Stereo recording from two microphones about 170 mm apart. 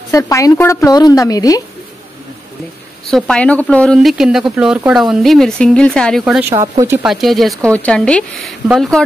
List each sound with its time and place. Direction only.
0.1 s a woman's voice: 20° left (ahead or behind)
3.1 s speech: 5° left (ahead or behind)
6.5 s speech: 20° right (ahead or behind)
7.0 s speech: centre (ahead or behind)